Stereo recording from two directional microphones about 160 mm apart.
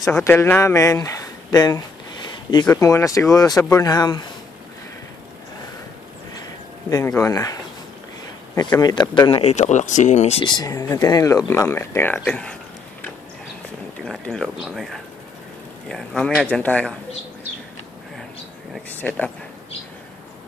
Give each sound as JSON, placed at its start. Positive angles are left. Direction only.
{"t": 0.1, "sound": "speech", "side_deg": 15}
{"t": 7.1, "sound": "speech", "side_deg": 20}
{"t": 8.5, "sound": "speech", "side_deg": 25}
{"t": 9.4, "sound": "speech", "side_deg": 45}
{"t": 10.4, "sound": "speech", "side_deg": 25}
{"t": 14.0, "sound": "a man's voice", "side_deg": 5}
{"t": 18.9, "sound": "speech", "side_deg": 10}